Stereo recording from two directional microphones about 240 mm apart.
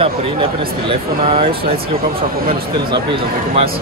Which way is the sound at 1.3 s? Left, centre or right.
Right.